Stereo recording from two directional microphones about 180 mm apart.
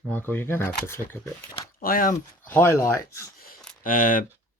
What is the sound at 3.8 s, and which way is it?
Speech, 50° left (ahead or behind).